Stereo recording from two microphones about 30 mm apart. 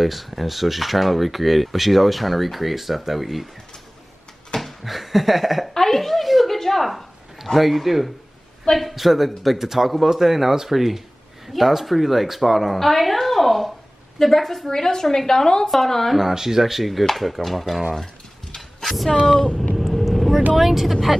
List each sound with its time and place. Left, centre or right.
0.0 s speech: centre
4.6 s a sound: centre
7.5 s speech: centre
14.7 s a woman's voice: centre
15.7 s speech: centre
16.2 s speech: centre
18.8 s a sound: centre
19.2 s a woman's voice: centre
19.9 s vehicle: centre
20.5 s speech: centre